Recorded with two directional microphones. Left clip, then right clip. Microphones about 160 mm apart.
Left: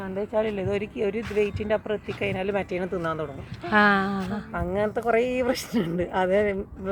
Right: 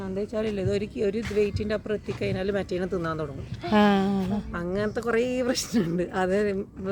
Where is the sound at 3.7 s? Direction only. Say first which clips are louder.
Left 3 dB; 40° right (ahead or behind).